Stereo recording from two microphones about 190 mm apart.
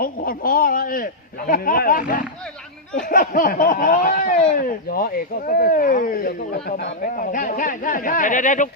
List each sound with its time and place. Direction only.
0.0 s speech: 50° left (ahead or behind)